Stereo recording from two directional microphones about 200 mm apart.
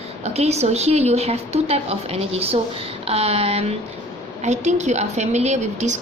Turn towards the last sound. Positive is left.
turn(degrees=-35)  # may be behind; listen again after turning